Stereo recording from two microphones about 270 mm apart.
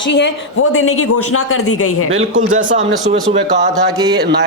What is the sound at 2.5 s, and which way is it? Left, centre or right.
Speech, right.